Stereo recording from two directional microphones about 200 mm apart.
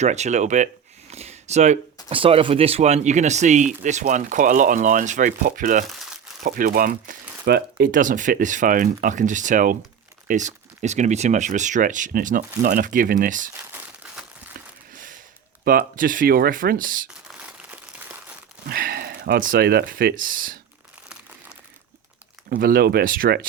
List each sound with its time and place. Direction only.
0.0 s speech: 35° right (ahead or behind)
5.9 s crumpling: centre (ahead or behind)
6.4 s speech: 45° right (ahead or behind)
13.7 s crumpling: 5° right (ahead or behind)
14.5 s a sound: 45° right (ahead or behind)
15.6 s speech: 45° right (ahead or behind)
17.6 s crumpling: 5° right (ahead or behind)
18.7 s speech: 50° right (ahead or behind)
22.4 s speech: 50° right (ahead or behind)